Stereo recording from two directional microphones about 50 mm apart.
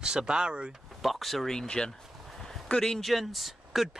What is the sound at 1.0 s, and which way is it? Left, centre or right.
Speech, centre.